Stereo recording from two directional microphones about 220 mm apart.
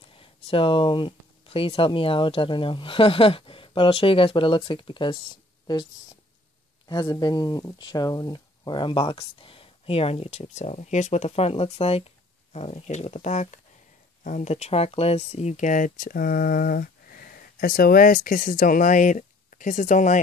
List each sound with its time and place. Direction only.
0.1 s speech: 25° left (ahead or behind)
6.9 s speech: 20° left (ahead or behind); by 20.2 s 35° left (ahead or behind)